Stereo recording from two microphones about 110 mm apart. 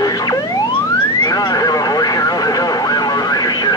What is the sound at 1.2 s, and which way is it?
Vehicle, 35° left (ahead or behind).